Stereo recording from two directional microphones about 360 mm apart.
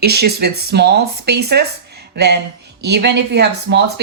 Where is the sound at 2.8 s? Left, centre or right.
Right.